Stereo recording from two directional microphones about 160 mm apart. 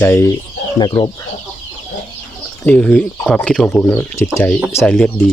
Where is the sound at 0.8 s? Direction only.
30° left (ahead or behind).